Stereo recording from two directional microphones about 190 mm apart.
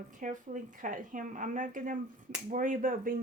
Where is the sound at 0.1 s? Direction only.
40° right (ahead or behind).